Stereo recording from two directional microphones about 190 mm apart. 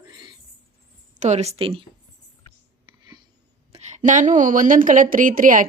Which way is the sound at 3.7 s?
40° right (ahead or behind).